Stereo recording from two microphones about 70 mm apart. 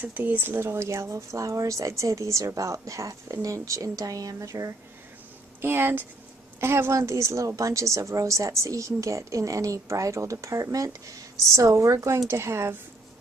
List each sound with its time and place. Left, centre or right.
0.0 s a woman's voice: right
5.6 s speech: right
6.9 s a woman's voice: right